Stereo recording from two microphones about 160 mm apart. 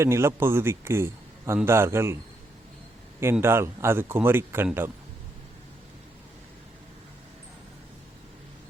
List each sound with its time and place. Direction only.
0.0 s speech: 15° right (ahead or behind)
3.4 s speech: 15° right (ahead or behind)